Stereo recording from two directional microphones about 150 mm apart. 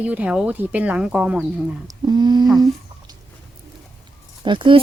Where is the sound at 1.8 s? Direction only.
30° right (ahead or behind).